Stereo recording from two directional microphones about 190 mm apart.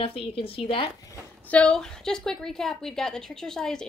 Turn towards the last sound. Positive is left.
turn(degrees=5)  # may be behind; listen again after turning